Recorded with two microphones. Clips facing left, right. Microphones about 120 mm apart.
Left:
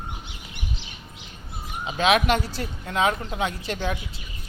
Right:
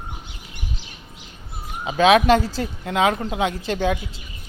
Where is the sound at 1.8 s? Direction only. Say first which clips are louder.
Right 6 dB; 35° right (ahead or behind).